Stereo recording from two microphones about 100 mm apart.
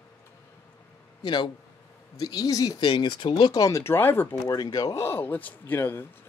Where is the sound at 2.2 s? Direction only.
40° left (ahead or behind).